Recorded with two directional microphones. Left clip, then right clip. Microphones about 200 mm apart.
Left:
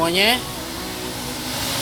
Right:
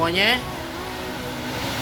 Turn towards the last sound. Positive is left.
turn(degrees=20)  # may be behind; listen again after turning